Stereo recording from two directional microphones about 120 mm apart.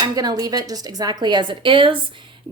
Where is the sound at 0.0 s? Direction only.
35° right (ahead or behind).